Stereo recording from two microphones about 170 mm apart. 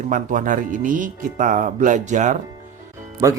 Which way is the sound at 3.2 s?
20° right (ahead or behind).